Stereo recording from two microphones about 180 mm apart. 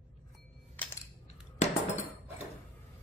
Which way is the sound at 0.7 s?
10° left (ahead or behind).